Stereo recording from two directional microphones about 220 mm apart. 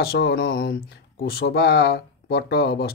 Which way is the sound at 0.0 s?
45° left (ahead or behind).